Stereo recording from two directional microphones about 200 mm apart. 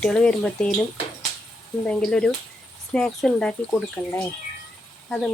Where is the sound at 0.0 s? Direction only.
5° left (ahead or behind).